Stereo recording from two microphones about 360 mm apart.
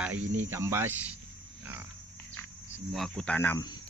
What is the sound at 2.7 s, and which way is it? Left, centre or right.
Speech, centre.